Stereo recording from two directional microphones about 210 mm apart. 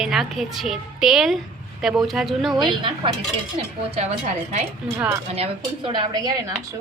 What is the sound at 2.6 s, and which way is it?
A woman's voice, 25° right (ahead or behind).